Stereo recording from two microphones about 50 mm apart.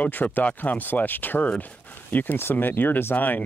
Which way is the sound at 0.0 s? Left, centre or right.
Left.